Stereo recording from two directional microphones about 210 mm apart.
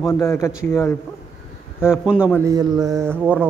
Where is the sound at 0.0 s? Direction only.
10° left (ahead or behind).